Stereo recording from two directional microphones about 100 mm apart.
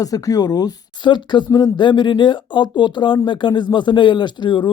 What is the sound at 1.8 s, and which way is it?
A man's voice, 50° left (ahead or behind).